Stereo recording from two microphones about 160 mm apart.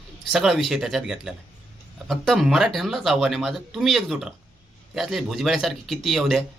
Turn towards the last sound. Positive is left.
turn(degrees=0)  # may be behind; listen again after turning